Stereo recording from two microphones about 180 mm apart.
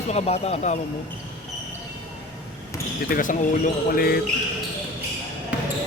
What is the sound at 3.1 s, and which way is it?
Speech, 45° left (ahead or behind).